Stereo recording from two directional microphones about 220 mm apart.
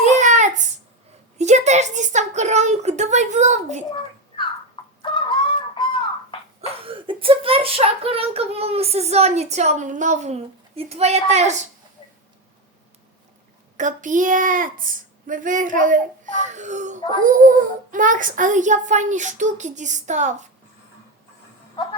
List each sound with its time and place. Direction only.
0.0 s a sound: 35° right (ahead or behind)
1.4 s a woman's voice: 30° right (ahead or behind)
5.1 s fowl: 20° left (ahead or behind)
6.6 s speech: 25° right (ahead or behind)
13.7 s a woman's voice: 35° right (ahead or behind)